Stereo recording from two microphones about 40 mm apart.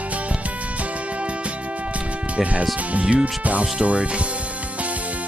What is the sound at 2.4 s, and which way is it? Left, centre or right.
Speech, right.